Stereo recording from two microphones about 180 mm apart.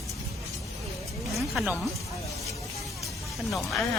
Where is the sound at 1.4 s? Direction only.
Centre (ahead or behind).